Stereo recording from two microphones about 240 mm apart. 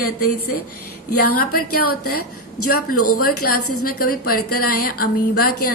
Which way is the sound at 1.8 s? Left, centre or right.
Left.